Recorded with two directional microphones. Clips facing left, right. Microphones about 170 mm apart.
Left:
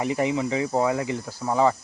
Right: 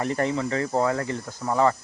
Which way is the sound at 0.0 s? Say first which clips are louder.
Left 1 dB; 10° left (ahead or behind).